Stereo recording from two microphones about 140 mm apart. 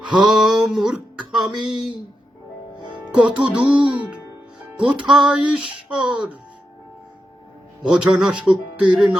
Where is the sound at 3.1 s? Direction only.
10° right (ahead or behind).